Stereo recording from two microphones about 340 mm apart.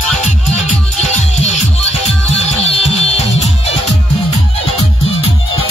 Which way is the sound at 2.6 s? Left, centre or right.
Centre.